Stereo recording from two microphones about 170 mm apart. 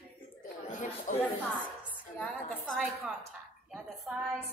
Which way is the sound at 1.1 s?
50° left (ahead or behind).